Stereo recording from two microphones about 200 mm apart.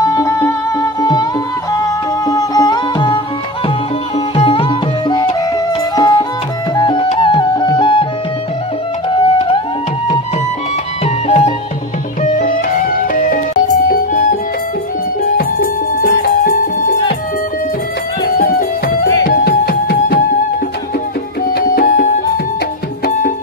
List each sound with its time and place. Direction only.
0.0 s music: 15° left (ahead or behind)
2.2 s music: 20° left (ahead or behind)
4.4 s music: 25° left (ahead or behind)
9.1 s music: 25° left (ahead or behind)
11.2 s music: 30° left (ahead or behind)
18.3 s music: 45° left (ahead or behind)
21.5 s music: 45° left (ahead or behind)